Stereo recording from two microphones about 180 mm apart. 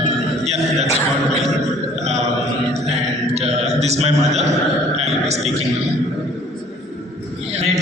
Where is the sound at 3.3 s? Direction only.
35° right (ahead or behind).